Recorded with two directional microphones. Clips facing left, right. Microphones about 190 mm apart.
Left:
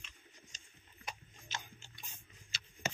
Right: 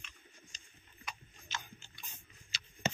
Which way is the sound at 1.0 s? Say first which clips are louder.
Left 1 dB; 45° left (ahead or behind).